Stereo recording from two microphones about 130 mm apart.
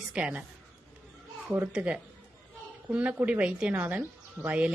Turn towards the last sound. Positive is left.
turn(degrees=-10)  # may be behind; listen again after turning